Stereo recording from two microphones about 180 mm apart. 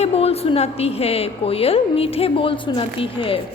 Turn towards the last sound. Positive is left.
turn(degrees=30)  # may be behind; listen again after turning